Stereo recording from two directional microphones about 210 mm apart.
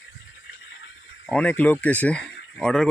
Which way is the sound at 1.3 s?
5° left (ahead or behind).